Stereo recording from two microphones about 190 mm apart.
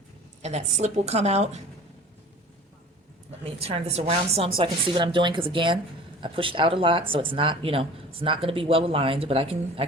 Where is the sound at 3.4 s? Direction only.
30° right (ahead or behind).